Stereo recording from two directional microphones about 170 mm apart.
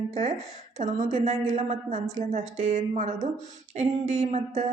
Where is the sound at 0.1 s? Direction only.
40° right (ahead or behind).